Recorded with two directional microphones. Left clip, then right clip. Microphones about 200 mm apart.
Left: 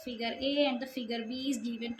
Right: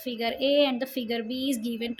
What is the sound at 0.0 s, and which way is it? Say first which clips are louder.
A woman's voice: right 7 dB; 45° right (ahead or behind).